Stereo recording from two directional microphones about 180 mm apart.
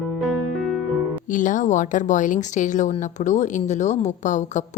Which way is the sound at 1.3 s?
45° left (ahead or behind).